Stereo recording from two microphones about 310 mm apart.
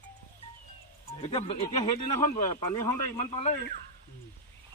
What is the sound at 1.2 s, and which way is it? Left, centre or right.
Speech, centre.